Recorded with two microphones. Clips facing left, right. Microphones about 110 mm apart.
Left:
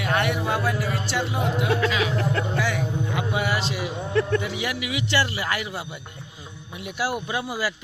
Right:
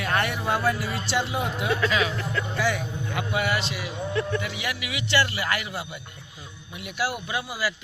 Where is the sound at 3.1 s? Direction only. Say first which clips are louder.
Right 1 dB; 25° left (ahead or behind).